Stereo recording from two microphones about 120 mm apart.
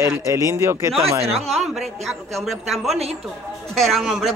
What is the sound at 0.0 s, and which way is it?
Speech, 20° right (ahead or behind).